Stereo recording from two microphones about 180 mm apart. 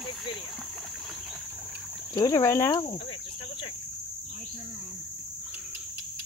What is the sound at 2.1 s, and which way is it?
Speech, 20° left (ahead or behind).